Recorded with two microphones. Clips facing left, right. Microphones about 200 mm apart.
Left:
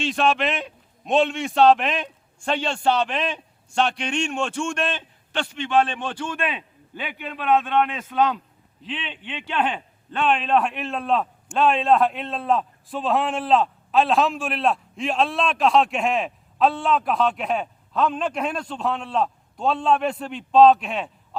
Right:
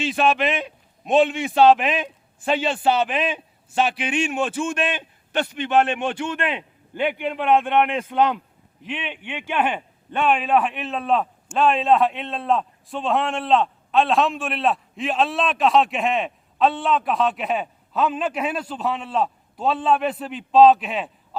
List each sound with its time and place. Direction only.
0.0 s a man's voice: centre (ahead or behind)
6.0 s a man's voice: 20° right (ahead or behind); by 21.1 s centre (ahead or behind)